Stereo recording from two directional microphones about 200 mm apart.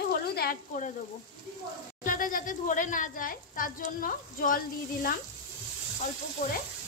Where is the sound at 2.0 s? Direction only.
40° left (ahead or behind).